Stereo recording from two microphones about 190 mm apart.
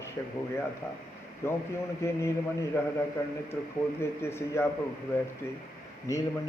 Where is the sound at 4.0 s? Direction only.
15° left (ahead or behind).